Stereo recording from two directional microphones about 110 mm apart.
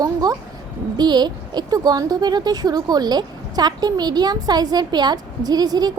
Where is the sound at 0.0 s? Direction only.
35° right (ahead or behind).